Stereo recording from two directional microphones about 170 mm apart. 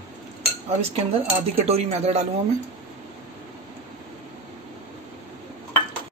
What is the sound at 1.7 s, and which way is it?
Speech, 40° right (ahead or behind).